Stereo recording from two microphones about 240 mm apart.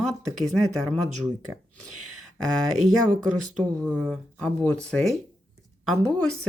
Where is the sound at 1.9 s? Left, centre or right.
Right.